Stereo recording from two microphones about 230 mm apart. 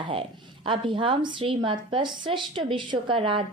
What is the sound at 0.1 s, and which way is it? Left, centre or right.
A woman's voice, right.